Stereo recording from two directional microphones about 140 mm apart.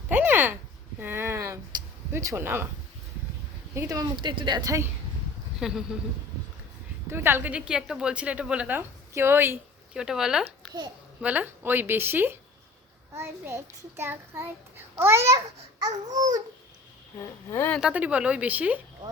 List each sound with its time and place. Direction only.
0.1 s a sound: 15° right (ahead or behind)
1.7 s a sound: 30° right (ahead or behind)
2.1 s a woman's voice: 20° right (ahead or behind)
3.8 s a woman's voice: 25° right (ahead or behind)
5.5 s speech: 5° right (ahead or behind)
7.1 s a woman's voice: 15° right (ahead or behind)
9.9 s a woman's voice: 5° right (ahead or behind); by 16.4 s 25° right (ahead or behind)
17.5 s speech: 15° left (ahead or behind)
17.7 s a woman's voice: 10° right (ahead or behind)